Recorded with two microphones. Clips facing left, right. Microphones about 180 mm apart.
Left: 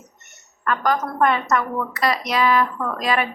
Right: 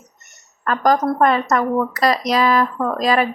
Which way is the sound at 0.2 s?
35° right (ahead or behind).